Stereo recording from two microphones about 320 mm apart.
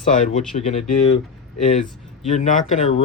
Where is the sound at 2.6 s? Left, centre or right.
Left.